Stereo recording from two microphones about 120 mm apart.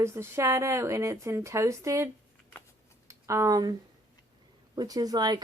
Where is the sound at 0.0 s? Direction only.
25° right (ahead or behind).